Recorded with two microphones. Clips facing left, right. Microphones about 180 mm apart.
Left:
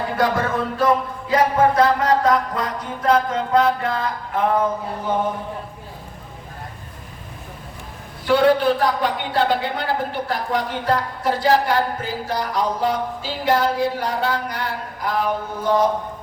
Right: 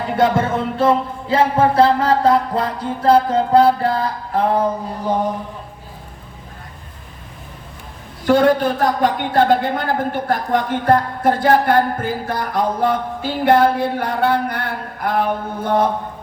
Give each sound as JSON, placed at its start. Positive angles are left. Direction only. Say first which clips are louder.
{"t": 0.2, "sound": "music", "louder": "right 4 dB", "side_deg": -25}
{"t": 8.3, "sound": "speech", "louder": "right 2 dB", "side_deg": -45}